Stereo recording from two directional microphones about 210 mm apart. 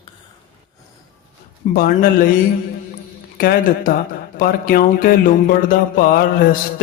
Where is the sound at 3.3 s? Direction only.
45° left (ahead or behind).